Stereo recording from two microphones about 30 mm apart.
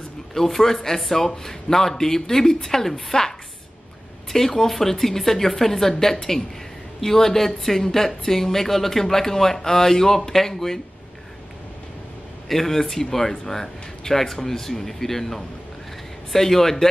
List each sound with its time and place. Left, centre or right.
0.3 s a woman's voice: centre
4.6 s a woman's voice: centre
12.4 s a woman's voice: centre